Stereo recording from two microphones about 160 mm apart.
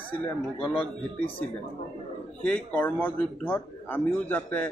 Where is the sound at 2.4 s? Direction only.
10° left (ahead or behind).